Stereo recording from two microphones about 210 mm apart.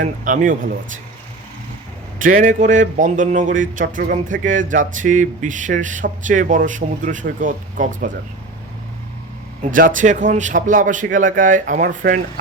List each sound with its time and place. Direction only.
0.0 s speech: 40° right (ahead or behind)
2.1 s speech: 40° right (ahead or behind)
9.7 s speech: 40° right (ahead or behind)